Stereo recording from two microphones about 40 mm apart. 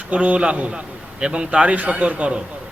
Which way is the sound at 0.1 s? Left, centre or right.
Right.